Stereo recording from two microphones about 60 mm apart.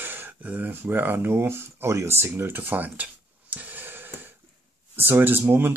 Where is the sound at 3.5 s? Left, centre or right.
Right.